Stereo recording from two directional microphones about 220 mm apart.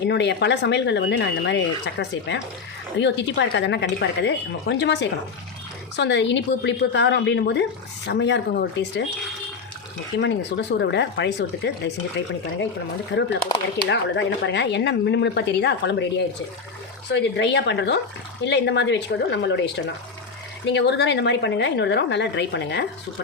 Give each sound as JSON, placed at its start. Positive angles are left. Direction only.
{"t": 0.0, "sound": "speech", "side_deg": 50}
{"t": 10.2, "sound": "speech", "side_deg": 50}
{"t": 13.1, "sound": "speech", "side_deg": 55}